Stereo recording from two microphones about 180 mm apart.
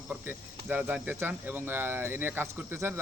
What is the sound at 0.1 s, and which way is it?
Speech, 10° right (ahead or behind).